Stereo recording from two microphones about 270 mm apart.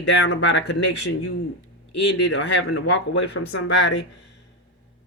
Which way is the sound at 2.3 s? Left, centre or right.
Left.